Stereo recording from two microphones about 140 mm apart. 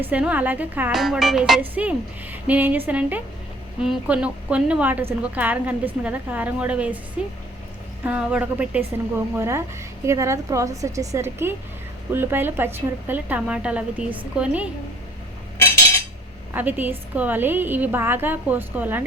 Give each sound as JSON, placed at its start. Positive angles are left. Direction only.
{"t": 0.0, "sound": "a woman's voice", "side_deg": -10}
{"t": 8.0, "sound": "a woman's voice", "side_deg": -10}
{"t": 16.5, "sound": "a woman's voice", "side_deg": -15}